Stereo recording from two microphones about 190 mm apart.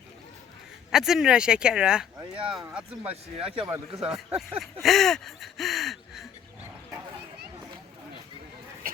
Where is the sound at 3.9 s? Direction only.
5° right (ahead or behind).